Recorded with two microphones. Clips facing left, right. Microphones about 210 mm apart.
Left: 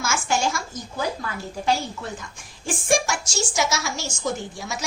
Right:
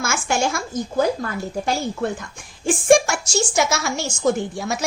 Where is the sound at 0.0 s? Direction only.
55° right (ahead or behind).